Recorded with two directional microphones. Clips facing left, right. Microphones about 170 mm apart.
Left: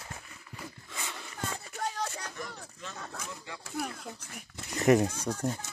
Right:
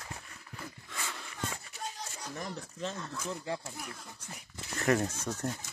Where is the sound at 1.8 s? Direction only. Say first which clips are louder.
Left 10 dB; 70° left (ahead or behind).